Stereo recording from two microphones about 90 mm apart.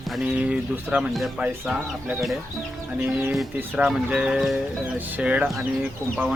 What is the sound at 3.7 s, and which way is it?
Speech, 5° right (ahead or behind).